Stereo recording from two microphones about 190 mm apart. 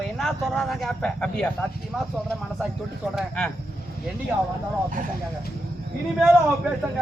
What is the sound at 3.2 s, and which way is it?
Speech, 5° left (ahead or behind).